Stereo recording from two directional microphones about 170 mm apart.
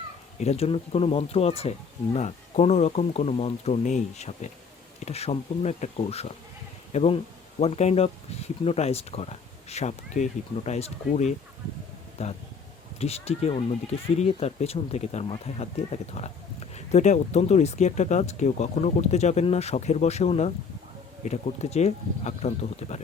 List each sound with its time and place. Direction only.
0.3 s speech: 40° left (ahead or behind)